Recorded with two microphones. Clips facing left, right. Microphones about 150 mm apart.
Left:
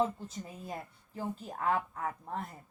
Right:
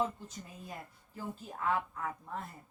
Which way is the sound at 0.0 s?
35° left (ahead or behind).